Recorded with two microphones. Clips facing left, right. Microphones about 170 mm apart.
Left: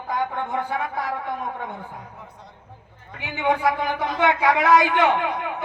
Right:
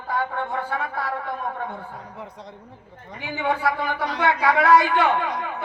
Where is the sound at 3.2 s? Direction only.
20° left (ahead or behind).